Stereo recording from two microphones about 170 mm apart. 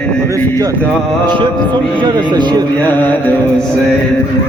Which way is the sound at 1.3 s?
25° right (ahead or behind).